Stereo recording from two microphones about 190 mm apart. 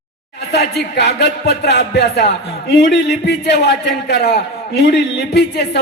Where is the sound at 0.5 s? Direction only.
60° left (ahead or behind).